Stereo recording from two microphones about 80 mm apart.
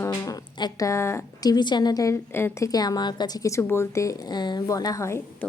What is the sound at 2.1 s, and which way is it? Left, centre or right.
Speech, left.